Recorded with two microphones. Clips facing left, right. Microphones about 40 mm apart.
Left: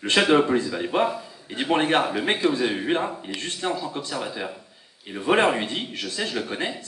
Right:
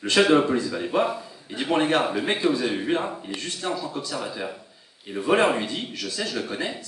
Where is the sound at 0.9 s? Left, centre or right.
Left.